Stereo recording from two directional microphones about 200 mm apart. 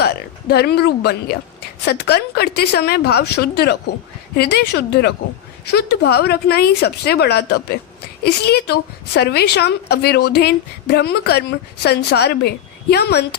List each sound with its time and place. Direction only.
0.0 s a woman's voice: 50° left (ahead or behind)